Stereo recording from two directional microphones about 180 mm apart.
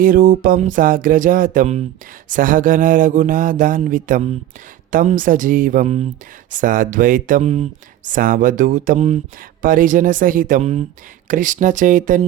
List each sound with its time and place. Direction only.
0.0 s speech: 50° right (ahead or behind)